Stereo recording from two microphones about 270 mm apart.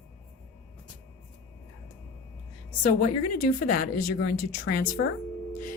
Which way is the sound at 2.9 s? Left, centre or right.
Left.